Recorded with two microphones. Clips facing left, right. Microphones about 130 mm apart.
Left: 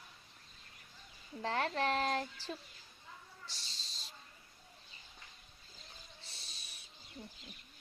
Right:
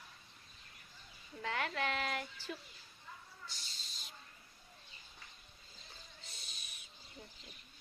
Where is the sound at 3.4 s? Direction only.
35° left (ahead or behind).